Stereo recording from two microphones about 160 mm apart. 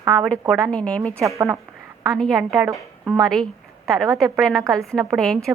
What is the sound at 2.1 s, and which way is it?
A woman's voice, centre (ahead or behind).